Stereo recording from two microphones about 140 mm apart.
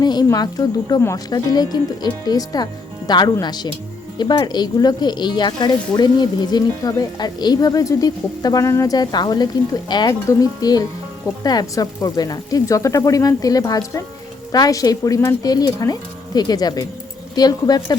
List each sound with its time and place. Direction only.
0.0 s speech: 30° left (ahead or behind)